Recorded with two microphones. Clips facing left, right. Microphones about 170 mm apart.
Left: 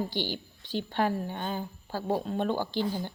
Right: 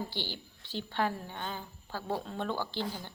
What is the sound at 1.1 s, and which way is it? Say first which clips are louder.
Speech: left 7 dB; 40° left (ahead or behind).